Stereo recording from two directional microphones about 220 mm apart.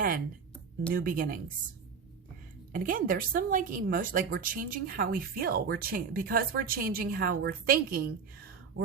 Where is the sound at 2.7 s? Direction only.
40° right (ahead or behind).